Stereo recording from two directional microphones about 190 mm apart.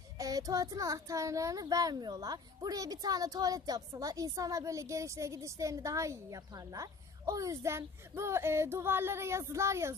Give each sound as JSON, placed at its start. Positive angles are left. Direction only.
{"t": 0.2, "sound": "a child's voice", "side_deg": -20}